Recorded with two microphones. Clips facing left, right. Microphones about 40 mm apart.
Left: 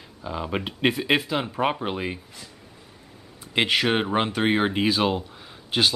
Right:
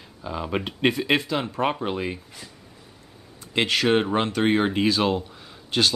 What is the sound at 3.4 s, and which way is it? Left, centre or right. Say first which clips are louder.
Speech: even; centre.